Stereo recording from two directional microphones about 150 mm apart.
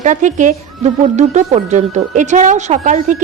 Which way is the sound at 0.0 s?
55° right (ahead or behind).